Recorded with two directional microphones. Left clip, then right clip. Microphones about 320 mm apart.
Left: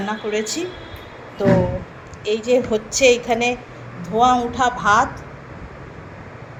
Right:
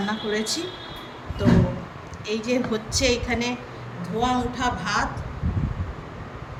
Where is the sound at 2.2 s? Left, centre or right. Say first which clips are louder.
Left 7 dB; centre.